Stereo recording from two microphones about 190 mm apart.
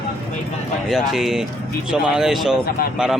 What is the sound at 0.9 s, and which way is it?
Speech, centre (ahead or behind).